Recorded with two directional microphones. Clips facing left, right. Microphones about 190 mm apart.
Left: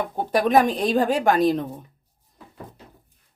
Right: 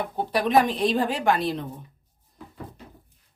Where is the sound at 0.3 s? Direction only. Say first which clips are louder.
Left 3 dB; 45° left (ahead or behind).